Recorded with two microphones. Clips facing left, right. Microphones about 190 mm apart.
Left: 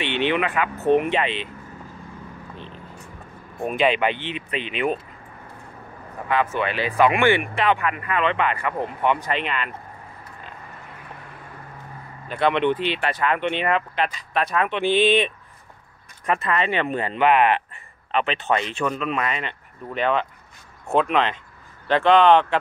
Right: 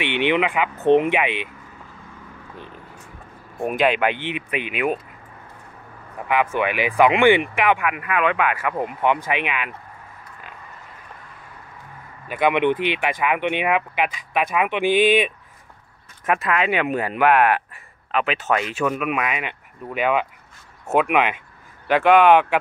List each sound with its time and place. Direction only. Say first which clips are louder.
0.0 s speech: right 2 dB; 15° right (ahead or behind)
3.8 s speech: right 1 dB; 10° right (ahead or behind)
6.2 s speech: right 2 dB; 15° right (ahead or behind)
12.3 s speech: right 1 dB; 10° right (ahead or behind)